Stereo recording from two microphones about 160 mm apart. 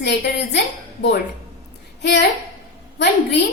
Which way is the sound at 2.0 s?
90° left.